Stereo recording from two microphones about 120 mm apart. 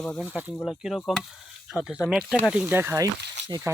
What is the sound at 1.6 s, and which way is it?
Speech, 10° right (ahead or behind).